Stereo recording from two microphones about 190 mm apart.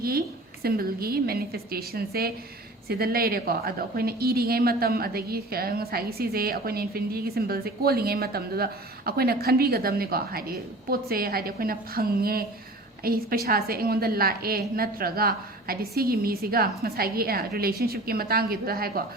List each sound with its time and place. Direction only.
0.6 s a woman's voice: 50° right (ahead or behind)